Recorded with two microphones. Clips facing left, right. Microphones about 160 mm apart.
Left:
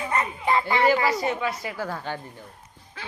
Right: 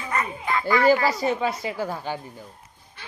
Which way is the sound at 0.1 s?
30° left (ahead or behind).